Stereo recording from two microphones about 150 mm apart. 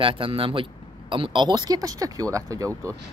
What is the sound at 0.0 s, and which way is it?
Speech, 35° right (ahead or behind).